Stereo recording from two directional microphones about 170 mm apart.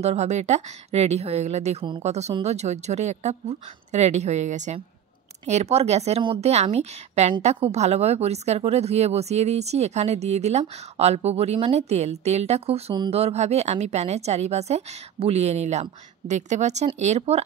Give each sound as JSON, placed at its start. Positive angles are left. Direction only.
{"t": 0.0, "sound": "a woman's voice", "side_deg": -40}